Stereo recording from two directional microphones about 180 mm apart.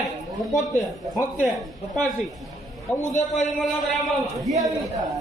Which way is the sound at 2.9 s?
15° left (ahead or behind).